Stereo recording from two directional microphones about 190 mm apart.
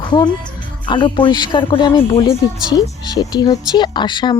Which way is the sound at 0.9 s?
25° left (ahead or behind).